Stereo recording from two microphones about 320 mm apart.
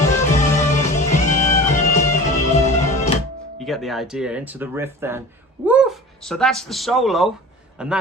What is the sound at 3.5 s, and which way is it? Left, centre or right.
Speech, centre.